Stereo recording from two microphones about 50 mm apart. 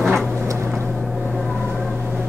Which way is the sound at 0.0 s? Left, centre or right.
Centre.